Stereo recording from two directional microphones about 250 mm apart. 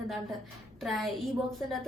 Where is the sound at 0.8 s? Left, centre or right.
Centre.